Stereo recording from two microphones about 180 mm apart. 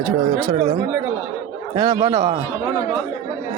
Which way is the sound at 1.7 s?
20° right (ahead or behind).